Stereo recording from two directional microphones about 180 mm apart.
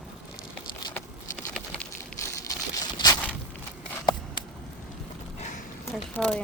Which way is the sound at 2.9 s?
20° left (ahead or behind).